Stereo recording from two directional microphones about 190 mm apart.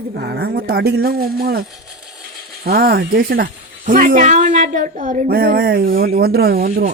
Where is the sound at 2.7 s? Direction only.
55° right (ahead or behind).